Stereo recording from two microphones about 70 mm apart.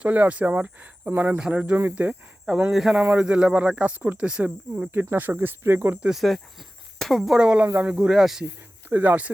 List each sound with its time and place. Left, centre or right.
0.0 s speech: right
2.7 s speech: centre
4.8 s speech: right
6.0 s speech: centre
7.9 s speech: centre
8.9 s speech: right